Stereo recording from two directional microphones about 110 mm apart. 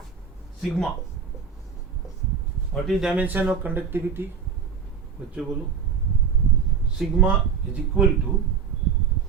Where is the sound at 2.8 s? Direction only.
5° right (ahead or behind).